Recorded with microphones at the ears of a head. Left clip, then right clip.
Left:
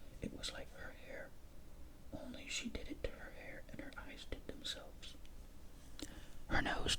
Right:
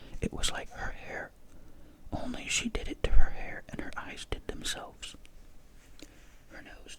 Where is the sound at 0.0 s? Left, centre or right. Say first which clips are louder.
Right 12 dB; right.